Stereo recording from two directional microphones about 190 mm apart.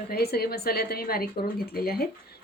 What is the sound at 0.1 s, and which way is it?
Speech, 55° left (ahead or behind).